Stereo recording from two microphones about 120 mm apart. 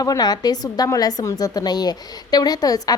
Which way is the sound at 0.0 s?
30° left (ahead or behind).